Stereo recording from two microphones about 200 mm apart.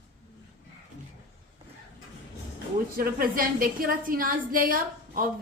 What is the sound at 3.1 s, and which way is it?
A woman's voice, 45° right (ahead or behind).